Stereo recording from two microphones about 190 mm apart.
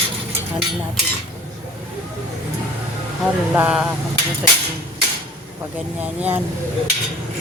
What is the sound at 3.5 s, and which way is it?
Speech, 5° right (ahead or behind).